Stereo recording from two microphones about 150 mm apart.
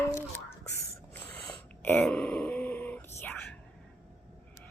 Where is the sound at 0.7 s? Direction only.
10° left (ahead or behind).